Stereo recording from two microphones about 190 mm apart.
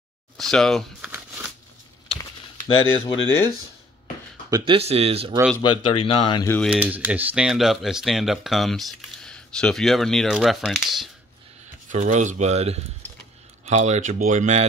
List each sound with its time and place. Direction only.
0.4 s speech: centre (ahead or behind)
1.1 s a sound: 10° right (ahead or behind)
2.7 s speech: 90° left
4.5 s speech: 25° right (ahead or behind)
5.6 s speech: 25° left (ahead or behind)
6.6 s speech: 5° right (ahead or behind)
11.9 s speech: 40° right (ahead or behind)